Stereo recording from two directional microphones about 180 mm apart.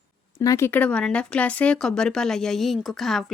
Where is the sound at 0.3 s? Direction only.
15° left (ahead or behind).